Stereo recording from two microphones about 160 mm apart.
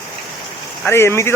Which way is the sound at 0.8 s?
15° left (ahead or behind).